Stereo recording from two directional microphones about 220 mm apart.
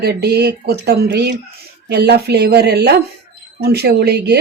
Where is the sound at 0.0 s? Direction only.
45° right (ahead or behind).